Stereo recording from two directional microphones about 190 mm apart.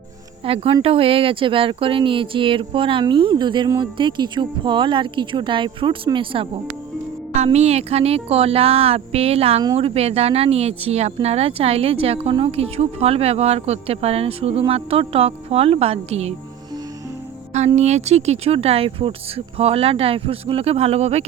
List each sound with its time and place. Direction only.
0.4 s speech: 30° right (ahead or behind)
17.5 s speech: 35° right (ahead or behind)